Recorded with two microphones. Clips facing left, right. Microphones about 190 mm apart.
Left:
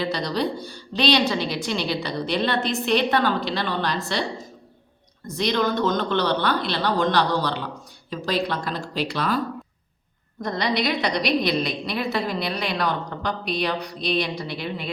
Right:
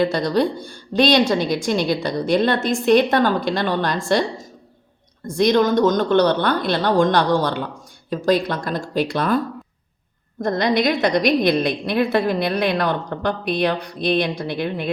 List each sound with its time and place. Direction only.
0.0 s a woman's voice: 50° right (ahead or behind)
10.4 s a woman's voice: 50° right (ahead or behind)